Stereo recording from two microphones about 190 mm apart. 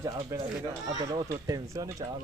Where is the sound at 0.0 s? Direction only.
15° right (ahead or behind).